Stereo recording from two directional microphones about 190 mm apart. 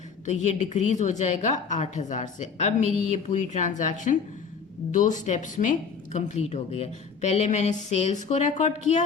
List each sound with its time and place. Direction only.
0.3 s speech: 40° left (ahead or behind)